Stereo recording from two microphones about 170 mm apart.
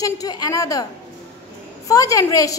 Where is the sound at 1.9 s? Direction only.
20° left (ahead or behind).